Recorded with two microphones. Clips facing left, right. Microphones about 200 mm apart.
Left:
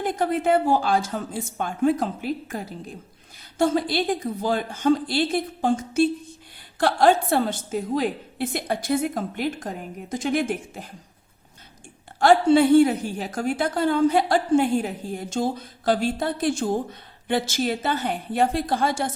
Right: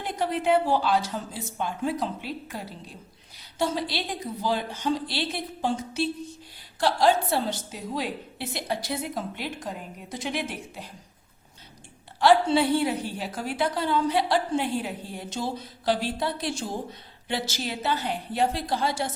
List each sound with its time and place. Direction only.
0.0 s a woman's voice: 50° left (ahead or behind)
12.2 s a woman's voice: 45° left (ahead or behind)